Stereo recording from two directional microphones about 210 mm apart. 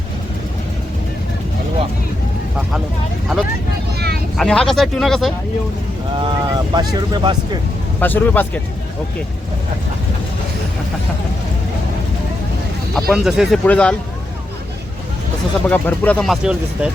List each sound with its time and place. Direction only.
3.9 s vehicle: 50° right (ahead or behind)
4.4 s speech: 5° left (ahead or behind)
6.1 s speech: 20° right (ahead or behind)
8.0 s speech: 10° left (ahead or behind)
12.9 s speech: centre (ahead or behind)
15.7 s speech: 5° left (ahead or behind)